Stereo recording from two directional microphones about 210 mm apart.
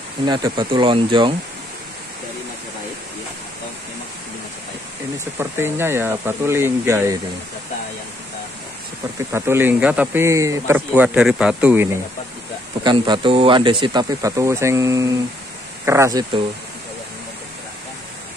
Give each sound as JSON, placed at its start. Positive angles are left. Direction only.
{"t": 0.2, "sound": "speech", "side_deg": -20}
{"t": 5.4, "sound": "speech", "side_deg": -10}
{"t": 9.3, "sound": "speech", "side_deg": -10}
{"t": 12.8, "sound": "speech", "side_deg": -20}